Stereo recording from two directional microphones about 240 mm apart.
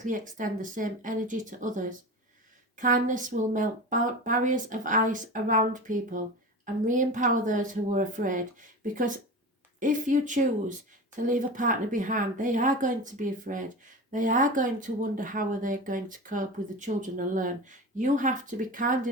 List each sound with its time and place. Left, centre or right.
0.0 s speech: right